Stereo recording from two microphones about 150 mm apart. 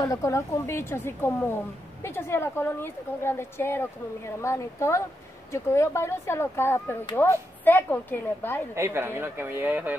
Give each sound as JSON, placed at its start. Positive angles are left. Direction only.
{"t": 0.0, "sound": "a woman's voice", "side_deg": 20}
{"t": 8.7, "sound": "speech", "side_deg": -15}